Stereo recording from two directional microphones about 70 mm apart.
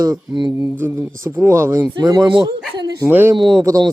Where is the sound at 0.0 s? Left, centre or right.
Right.